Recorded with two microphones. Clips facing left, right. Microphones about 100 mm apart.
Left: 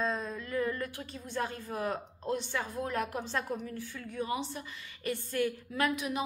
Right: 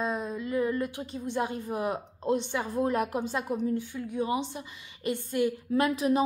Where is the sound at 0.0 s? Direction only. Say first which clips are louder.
Right 3 dB; 15° right (ahead or behind).